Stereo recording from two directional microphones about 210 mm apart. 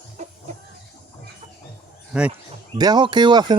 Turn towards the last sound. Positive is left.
turn(degrees=-20)  # may be behind; listen again after turning